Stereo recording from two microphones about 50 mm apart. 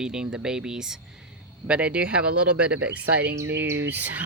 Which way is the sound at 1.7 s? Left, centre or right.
Right.